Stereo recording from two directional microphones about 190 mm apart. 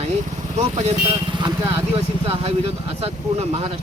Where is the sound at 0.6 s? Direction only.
30° right (ahead or behind).